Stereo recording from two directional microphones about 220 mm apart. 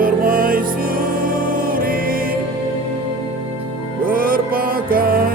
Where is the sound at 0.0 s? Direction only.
40° right (ahead or behind).